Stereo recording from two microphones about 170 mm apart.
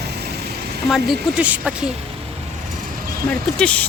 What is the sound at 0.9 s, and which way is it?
Speech, centre (ahead or behind).